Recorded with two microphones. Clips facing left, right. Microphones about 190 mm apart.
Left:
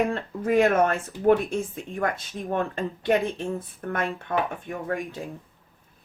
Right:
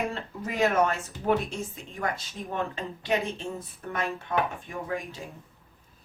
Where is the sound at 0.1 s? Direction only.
55° left (ahead or behind).